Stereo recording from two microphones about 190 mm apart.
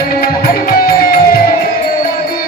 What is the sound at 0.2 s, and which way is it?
Music, 50° left (ahead or behind).